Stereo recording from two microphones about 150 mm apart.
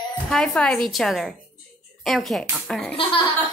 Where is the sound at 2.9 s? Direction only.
35° left (ahead or behind).